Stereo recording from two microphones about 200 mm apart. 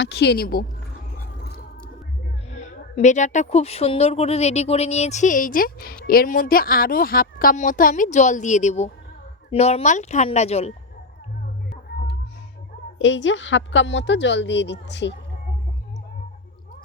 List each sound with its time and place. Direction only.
0.0 s a woman's voice: 55° left (ahead or behind)
2.5 s speech: 35° left (ahead or behind)
13.0 s a woman's voice: 65° left (ahead or behind)